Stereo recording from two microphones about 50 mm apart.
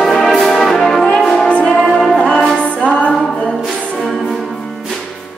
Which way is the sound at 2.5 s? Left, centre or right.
Left.